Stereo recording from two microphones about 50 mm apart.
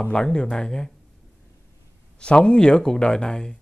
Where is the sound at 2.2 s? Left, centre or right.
Centre.